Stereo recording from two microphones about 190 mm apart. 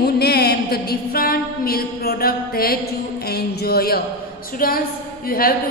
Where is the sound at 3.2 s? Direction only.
55° left (ahead or behind).